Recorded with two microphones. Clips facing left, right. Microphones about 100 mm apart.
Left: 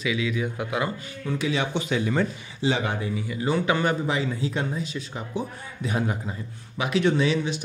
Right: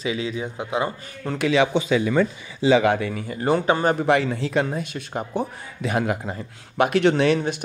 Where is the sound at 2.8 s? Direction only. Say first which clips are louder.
Right 7 dB; 70° right (ahead or behind).